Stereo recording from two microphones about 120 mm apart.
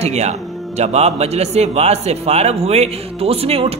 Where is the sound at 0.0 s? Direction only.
65° right (ahead or behind).